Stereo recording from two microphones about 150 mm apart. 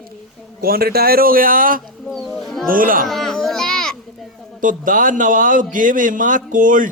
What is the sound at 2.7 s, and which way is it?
Speech, 65° right (ahead or behind).